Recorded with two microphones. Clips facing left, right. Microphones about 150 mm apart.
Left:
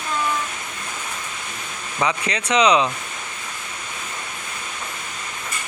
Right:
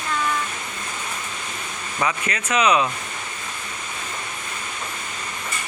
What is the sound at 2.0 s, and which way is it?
Speech, 15° left (ahead or behind).